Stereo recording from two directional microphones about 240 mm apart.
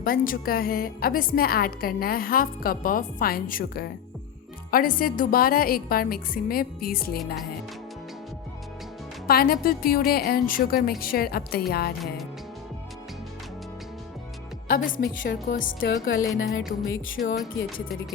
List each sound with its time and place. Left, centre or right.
0.0 s a woman's voice: left
9.2 s a woman's voice: left
14.7 s a woman's voice: left
16.1 s music: left